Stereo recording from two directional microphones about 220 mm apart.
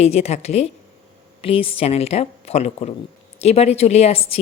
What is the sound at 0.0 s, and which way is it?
Speech, 30° left (ahead or behind).